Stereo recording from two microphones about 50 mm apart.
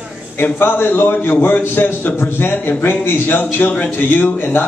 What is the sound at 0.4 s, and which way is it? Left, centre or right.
A man's voice, left.